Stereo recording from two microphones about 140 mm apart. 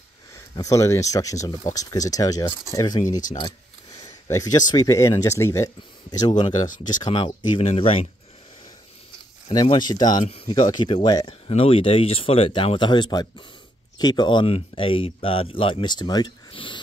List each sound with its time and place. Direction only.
0.3 s speech: 25° left (ahead or behind); by 8.1 s 45° left (ahead or behind)
9.5 s speech: 30° left (ahead or behind)